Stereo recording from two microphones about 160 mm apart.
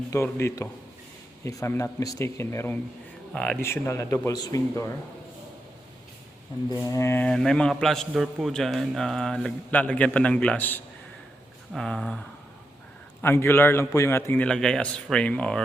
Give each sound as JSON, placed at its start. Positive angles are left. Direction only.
{"t": 0.1, "sound": "a man's voice", "side_deg": 15}
{"t": 3.3, "sound": "a man's voice", "side_deg": 5}
{"t": 3.6, "sound": "a man's voice", "side_deg": 15}
{"t": 6.7, "sound": "a man's voice", "side_deg": 20}
{"t": 7.3, "sound": "a man's voice", "side_deg": 5}
{"t": 13.2, "sound": "a man's voice", "side_deg": 15}